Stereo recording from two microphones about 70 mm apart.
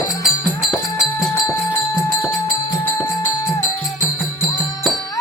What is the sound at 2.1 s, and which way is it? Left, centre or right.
Music, left.